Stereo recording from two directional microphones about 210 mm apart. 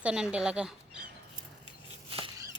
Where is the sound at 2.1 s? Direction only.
20° right (ahead or behind).